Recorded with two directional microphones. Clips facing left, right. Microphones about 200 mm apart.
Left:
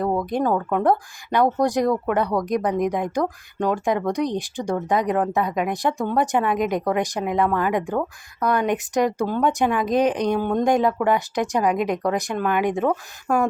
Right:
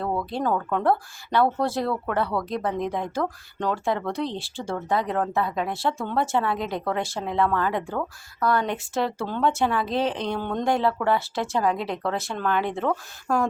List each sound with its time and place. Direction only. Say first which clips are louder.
0.0 s speech: left 4 dB; 15° left (ahead or behind)